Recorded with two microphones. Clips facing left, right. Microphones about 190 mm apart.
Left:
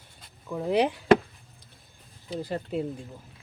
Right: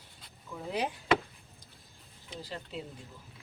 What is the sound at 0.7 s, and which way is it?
Speech, 70° left (ahead or behind).